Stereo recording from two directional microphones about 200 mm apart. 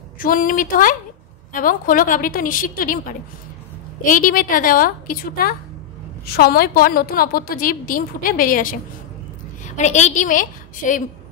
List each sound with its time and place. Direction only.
0.2 s a woman's voice: 45° left (ahead or behind)
9.8 s a woman's voice: 35° left (ahead or behind)